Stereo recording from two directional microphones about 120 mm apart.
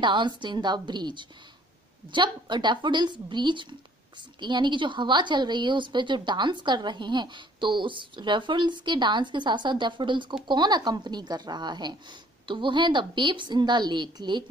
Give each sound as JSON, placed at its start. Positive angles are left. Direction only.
{"t": 0.0, "sound": "a woman's voice", "side_deg": -40}